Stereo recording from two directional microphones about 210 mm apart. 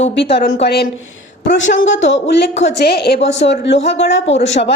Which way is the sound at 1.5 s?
60° left (ahead or behind).